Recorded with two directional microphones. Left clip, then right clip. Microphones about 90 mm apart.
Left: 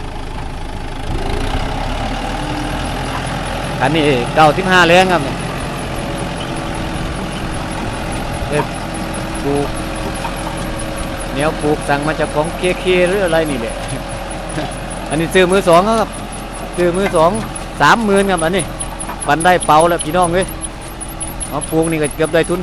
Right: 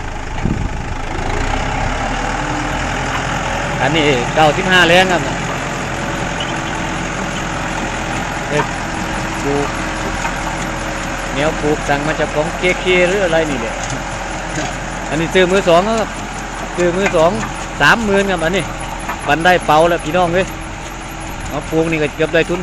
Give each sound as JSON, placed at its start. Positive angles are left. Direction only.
{"t": 3.8, "sound": "speech", "side_deg": 30}
{"t": 11.3, "sound": "speech", "side_deg": 15}
{"t": 15.1, "sound": "speech", "side_deg": 20}
{"t": 16.8, "sound": "speech", "side_deg": 15}
{"t": 18.1, "sound": "speech", "side_deg": 30}
{"t": 19.3, "sound": "speech", "side_deg": 10}
{"t": 21.8, "sound": "speech", "side_deg": 10}